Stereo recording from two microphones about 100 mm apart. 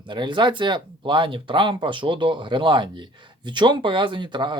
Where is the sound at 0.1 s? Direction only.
50° right (ahead or behind).